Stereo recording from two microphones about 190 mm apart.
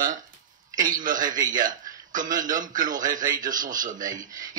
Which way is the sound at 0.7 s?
45° right (ahead or behind).